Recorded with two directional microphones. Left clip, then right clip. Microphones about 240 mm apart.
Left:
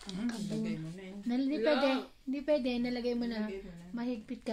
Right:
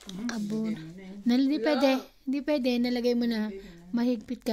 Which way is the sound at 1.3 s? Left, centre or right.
Right.